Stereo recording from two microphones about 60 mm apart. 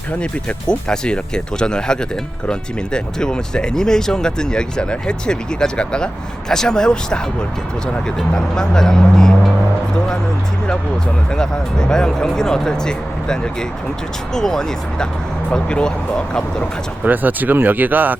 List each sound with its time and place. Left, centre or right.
0.1 s speech: centre
11.3 s speech: centre
17.0 s speech: right